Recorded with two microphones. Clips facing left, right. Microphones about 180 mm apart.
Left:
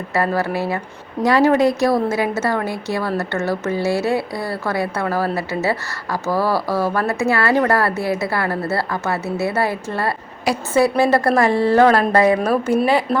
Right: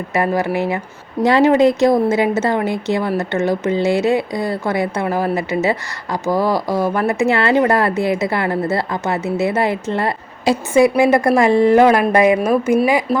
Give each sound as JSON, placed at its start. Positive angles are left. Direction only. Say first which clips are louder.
{"t": 0.1, "sound": "a woman's voice", "louder": "right 2 dB", "side_deg": -15}